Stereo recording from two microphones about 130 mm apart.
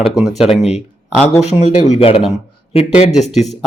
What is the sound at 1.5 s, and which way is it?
A man's voice, 55° left (ahead or behind).